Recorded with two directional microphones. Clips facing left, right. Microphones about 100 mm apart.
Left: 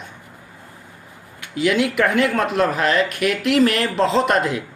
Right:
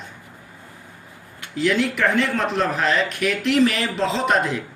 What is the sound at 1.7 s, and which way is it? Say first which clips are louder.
Speech: left 2 dB; 10° left (ahead or behind).